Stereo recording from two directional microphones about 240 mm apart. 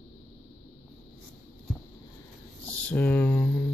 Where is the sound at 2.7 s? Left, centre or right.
Centre.